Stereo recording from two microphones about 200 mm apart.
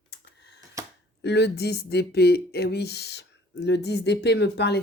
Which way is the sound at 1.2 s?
60° left (ahead or behind).